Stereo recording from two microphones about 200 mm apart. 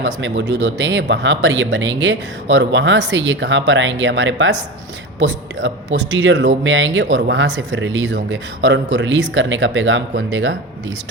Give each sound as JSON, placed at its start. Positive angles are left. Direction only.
{"t": 0.0, "sound": "speech", "side_deg": -65}